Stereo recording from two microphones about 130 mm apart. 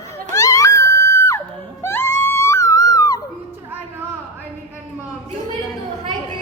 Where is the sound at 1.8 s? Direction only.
20° left (ahead or behind).